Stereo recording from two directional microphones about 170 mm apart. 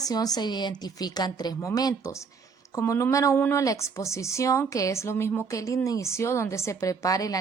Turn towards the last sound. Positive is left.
turn(degrees=20)  # may be behind; listen again after turning